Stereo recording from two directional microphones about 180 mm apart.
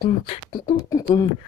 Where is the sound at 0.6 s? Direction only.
20° left (ahead or behind).